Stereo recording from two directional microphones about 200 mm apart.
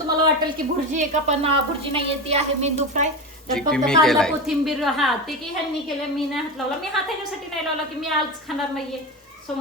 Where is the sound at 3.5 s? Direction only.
5° left (ahead or behind).